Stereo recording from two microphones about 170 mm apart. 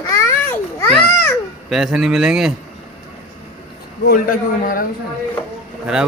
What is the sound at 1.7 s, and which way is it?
Speech, 5° right (ahead or behind).